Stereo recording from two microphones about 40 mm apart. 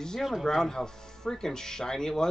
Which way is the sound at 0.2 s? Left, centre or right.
Centre.